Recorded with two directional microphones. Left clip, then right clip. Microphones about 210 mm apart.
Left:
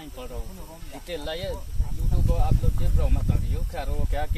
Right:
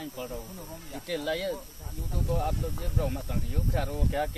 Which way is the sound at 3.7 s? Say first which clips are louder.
Right 2 dB; 15° left (ahead or behind).